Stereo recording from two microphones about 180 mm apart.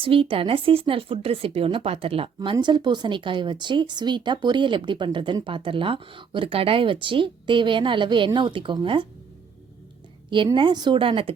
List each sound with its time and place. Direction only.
0.0 s speech: 30° right (ahead or behind)
10.2 s speech: 25° right (ahead or behind)